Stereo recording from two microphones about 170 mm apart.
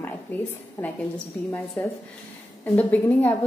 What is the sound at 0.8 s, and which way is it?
Speech, 20° left (ahead or behind).